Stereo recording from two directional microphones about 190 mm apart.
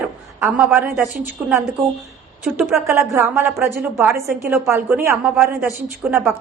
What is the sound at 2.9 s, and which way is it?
A woman's voice, 15° right (ahead or behind).